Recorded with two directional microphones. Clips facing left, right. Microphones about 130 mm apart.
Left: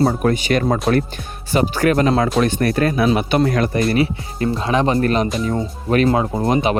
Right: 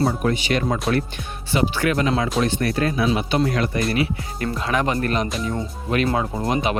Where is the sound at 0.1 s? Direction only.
45° left (ahead or behind).